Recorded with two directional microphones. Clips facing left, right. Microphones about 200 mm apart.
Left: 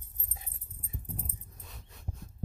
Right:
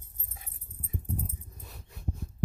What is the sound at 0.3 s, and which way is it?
Dog, 25° left (ahead or behind).